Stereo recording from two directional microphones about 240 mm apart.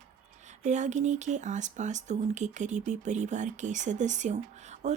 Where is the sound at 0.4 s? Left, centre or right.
Right.